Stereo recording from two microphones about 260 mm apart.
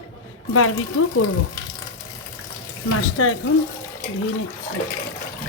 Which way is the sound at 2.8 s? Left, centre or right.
Left.